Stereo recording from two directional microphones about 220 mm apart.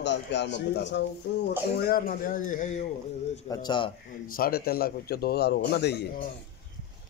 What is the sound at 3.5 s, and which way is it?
Speech, 20° left (ahead or behind).